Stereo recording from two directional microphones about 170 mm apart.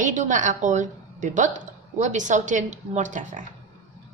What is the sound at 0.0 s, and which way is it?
A woman's voice, 50° right (ahead or behind).